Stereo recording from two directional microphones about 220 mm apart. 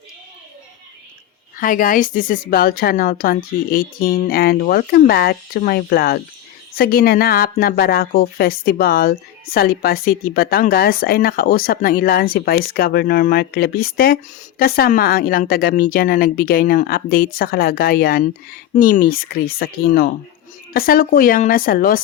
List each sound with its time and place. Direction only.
1.5 s a woman's voice: 40° left (ahead or behind)